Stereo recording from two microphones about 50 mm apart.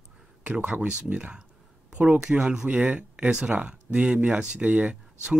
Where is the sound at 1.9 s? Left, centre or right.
Right.